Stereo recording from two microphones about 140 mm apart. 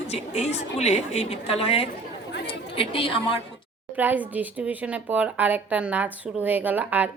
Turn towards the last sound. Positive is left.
turn(degrees=-10)  # may be behind; listen again after turning